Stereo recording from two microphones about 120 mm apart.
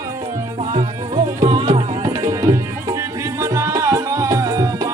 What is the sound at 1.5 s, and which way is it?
Music, 45° right (ahead or behind).